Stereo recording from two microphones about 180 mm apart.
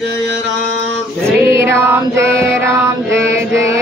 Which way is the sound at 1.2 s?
15° right (ahead or behind).